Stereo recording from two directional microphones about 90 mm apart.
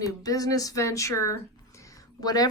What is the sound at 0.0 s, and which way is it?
Speech, 40° left (ahead or behind).